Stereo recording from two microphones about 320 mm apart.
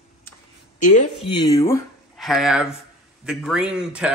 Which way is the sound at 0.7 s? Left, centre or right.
Left.